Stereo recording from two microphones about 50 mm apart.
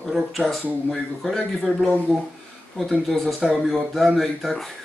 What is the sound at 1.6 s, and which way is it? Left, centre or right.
Speech, right.